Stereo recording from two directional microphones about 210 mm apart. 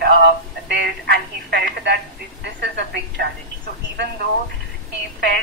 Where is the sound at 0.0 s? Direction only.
50° right (ahead or behind).